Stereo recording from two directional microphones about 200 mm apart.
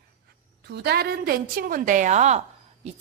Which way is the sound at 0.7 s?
55° right (ahead or behind).